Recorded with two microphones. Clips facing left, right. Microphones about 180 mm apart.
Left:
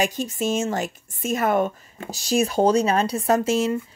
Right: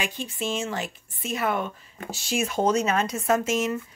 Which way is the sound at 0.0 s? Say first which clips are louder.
Left 7 dB; 45° left (ahead or behind).